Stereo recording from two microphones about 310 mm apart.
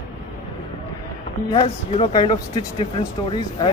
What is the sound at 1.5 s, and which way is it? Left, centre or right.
Speech, centre.